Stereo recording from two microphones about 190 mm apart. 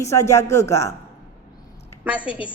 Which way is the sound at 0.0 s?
15° left (ahead or behind).